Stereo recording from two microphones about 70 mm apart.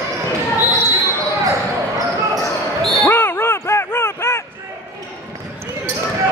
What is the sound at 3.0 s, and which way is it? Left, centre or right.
Ding, left.